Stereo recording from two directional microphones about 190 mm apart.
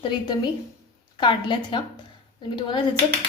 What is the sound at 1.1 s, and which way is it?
Speech, 25° left (ahead or behind).